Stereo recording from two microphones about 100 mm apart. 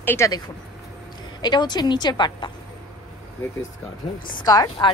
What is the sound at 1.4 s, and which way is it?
A woman's voice, 45° left (ahead or behind).